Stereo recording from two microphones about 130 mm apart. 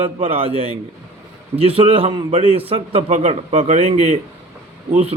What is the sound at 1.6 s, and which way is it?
Speech, 45° right (ahead or behind).